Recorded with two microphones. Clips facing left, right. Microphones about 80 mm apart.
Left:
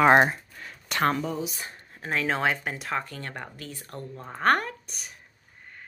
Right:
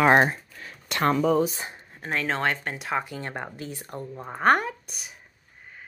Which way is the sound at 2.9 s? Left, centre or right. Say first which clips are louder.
Right 5 dB; centre.